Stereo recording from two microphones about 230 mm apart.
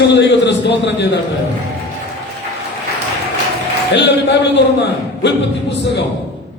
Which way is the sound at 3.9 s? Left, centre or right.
Left.